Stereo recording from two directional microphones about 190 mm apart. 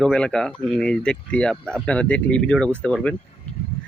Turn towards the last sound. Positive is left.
turn(degrees=5)  # may be behind; listen again after turning